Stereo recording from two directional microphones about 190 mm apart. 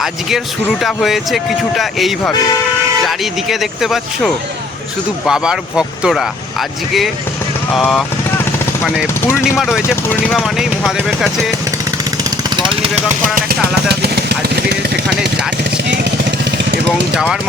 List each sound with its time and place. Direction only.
0.0 s speech: centre (ahead or behind)
9.4 s speech: centre (ahead or behind)
13.3 s speech: 55° right (ahead or behind)